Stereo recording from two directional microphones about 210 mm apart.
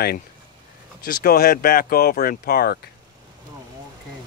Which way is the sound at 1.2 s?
45° left (ahead or behind).